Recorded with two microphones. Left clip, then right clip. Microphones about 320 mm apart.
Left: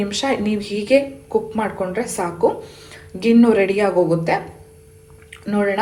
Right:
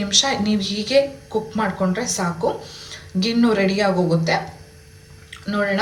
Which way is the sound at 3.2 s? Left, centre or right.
Centre.